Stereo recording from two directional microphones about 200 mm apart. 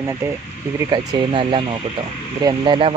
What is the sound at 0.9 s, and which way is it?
Speech, 25° right (ahead or behind).